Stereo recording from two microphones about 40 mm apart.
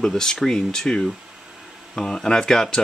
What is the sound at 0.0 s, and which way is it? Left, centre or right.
Speech, centre.